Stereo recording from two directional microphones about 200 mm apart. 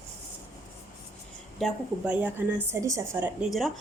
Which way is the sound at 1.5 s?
Centre (ahead or behind).